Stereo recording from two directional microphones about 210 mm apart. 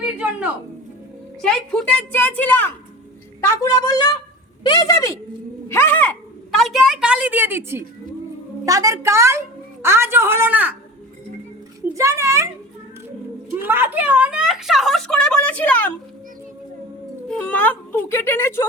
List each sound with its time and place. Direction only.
0.2 s a woman's voice: 5° right (ahead or behind)
11.9 s a woman's voice: 15° right (ahead or behind)
13.6 s a woman's voice: 10° right (ahead or behind); by 15.9 s 5° left (ahead or behind)
17.2 s speech: 5° left (ahead or behind)